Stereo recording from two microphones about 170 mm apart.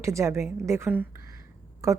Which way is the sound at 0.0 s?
15° right (ahead or behind).